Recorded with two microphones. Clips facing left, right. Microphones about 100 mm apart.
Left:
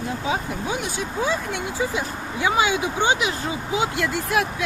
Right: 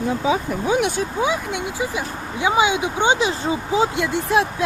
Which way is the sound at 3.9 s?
20° right (ahead or behind).